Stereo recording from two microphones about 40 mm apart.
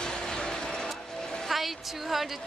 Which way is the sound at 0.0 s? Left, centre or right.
Centre.